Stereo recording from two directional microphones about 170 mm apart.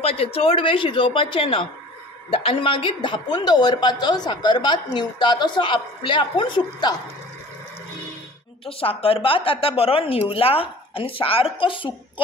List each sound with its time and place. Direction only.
0.0 s a woman's voice: 35° left (ahead or behind)
8.6 s a woman's voice: 35° left (ahead or behind)